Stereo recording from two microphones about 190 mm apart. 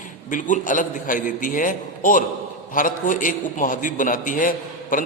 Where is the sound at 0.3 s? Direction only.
40° left (ahead or behind).